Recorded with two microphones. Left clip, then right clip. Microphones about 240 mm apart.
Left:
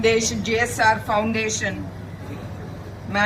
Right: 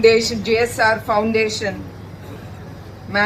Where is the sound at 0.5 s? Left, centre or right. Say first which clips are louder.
Right 2 dB; right.